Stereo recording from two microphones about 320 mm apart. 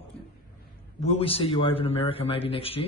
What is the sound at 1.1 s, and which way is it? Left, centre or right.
Speech, centre.